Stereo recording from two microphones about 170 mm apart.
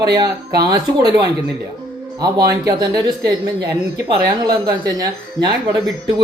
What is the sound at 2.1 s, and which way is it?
Speech, 20° right (ahead or behind).